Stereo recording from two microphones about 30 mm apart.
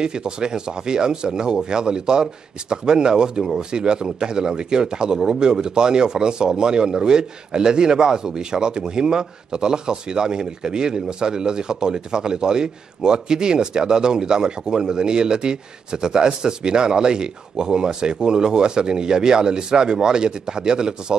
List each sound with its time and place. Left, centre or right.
0.0 s speech: right